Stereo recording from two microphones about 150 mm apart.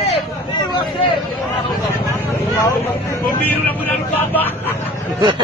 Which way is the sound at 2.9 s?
20° left (ahead or behind).